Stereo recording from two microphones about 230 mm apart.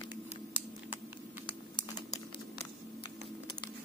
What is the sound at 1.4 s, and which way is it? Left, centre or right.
Typing, centre.